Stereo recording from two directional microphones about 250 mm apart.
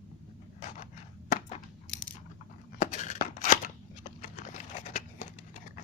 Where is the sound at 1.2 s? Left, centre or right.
Left.